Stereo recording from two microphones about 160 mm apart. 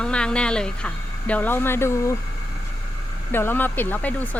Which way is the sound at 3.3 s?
15° left (ahead or behind).